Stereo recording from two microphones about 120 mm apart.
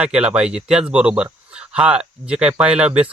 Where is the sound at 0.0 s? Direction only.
10° right (ahead or behind).